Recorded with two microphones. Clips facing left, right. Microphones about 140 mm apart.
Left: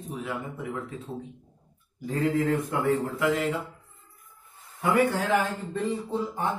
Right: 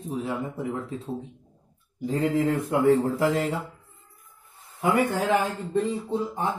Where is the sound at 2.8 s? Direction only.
35° right (ahead or behind).